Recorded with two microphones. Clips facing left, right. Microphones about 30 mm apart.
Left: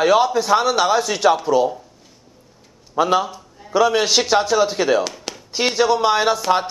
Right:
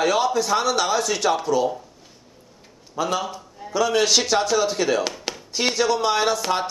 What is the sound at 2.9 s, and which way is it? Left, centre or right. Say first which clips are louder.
Speech: left 7 dB; left.